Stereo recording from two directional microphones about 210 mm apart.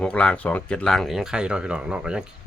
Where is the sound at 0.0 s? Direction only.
5° left (ahead or behind).